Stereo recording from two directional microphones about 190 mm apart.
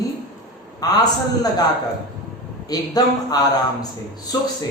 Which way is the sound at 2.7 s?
20° left (ahead or behind).